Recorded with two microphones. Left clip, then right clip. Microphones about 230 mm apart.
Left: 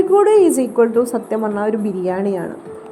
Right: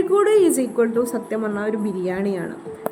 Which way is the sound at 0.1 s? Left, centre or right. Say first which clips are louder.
Left 3 dB; centre.